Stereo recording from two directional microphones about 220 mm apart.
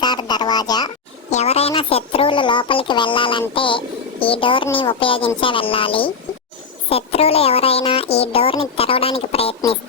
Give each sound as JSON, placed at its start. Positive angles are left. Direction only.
{"t": 0.0, "sound": "a child's voice", "side_deg": 20}
{"t": 1.3, "sound": "a child's voice", "side_deg": 30}